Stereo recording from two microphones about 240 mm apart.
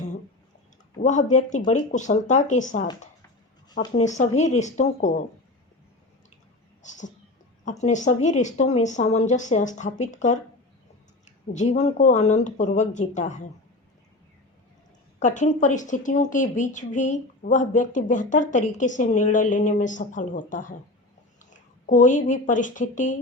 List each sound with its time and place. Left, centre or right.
1.0 s a woman's voice: left
3.8 s a woman's voice: left
6.8 s a woman's voice: left
11.5 s a woman's voice: left
15.2 s a woman's voice: left